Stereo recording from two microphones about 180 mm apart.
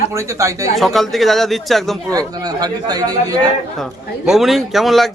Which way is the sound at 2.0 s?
20° right (ahead or behind).